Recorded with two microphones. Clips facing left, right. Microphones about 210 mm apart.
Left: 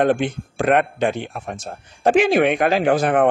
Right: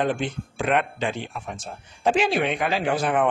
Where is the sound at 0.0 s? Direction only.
70° left (ahead or behind).